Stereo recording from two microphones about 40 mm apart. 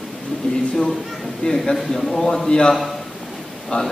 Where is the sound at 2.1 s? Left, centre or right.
Centre.